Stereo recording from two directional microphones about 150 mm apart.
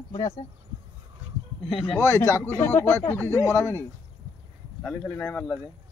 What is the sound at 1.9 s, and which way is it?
Speech, 20° left (ahead or behind).